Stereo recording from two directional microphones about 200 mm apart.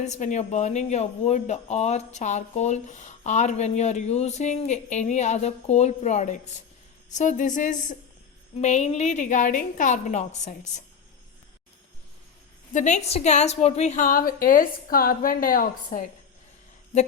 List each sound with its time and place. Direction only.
0.0 s speech: 35° left (ahead or behind)
12.7 s speech: 35° left (ahead or behind)